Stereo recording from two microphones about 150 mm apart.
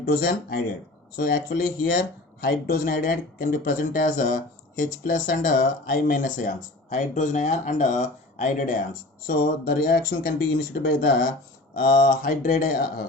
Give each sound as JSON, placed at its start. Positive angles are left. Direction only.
{"t": 0.0, "sound": "speech", "side_deg": 70}
{"t": 9.2, "sound": "speech", "side_deg": 75}
{"t": 11.7, "sound": "speech", "side_deg": 65}